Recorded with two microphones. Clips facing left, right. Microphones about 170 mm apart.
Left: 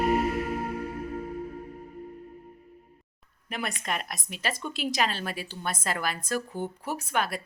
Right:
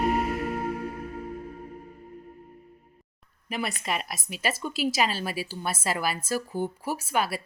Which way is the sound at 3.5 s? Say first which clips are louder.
Right 2 dB; 5° right (ahead or behind).